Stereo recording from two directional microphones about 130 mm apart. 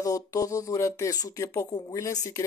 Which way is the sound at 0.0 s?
25° left (ahead or behind).